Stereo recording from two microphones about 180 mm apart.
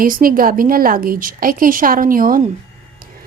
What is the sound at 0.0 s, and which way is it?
A woman's voice, 50° right (ahead or behind).